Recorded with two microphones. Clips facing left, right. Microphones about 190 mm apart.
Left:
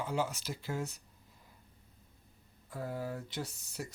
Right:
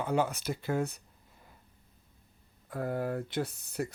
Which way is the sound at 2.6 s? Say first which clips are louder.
Right 6 dB; 60° right (ahead or behind).